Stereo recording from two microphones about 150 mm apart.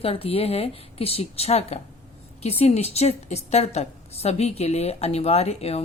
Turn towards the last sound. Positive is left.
turn(degrees=45)  # may be behind; listen again after turning